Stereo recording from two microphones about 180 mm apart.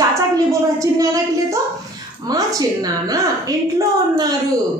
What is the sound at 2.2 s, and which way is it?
A woman's voice, 20° right (ahead or behind).